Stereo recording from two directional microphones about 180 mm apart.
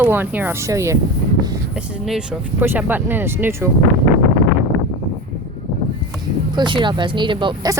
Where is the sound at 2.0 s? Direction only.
5° right (ahead or behind).